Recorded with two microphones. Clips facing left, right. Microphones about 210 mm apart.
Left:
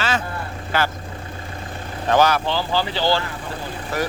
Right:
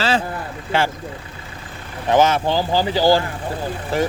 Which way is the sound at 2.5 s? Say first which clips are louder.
Right 4 dB; 45° right (ahead or behind).